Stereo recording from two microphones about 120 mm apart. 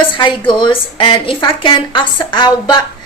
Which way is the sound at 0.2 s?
40° left (ahead or behind).